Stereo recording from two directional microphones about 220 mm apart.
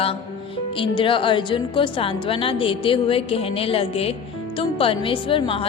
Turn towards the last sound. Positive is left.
turn(degrees=25)  # may be behind; listen again after turning